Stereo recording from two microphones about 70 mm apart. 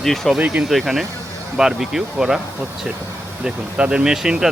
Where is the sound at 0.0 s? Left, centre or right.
Centre.